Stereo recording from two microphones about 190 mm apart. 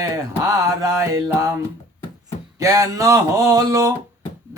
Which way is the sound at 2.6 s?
15° right (ahead or behind).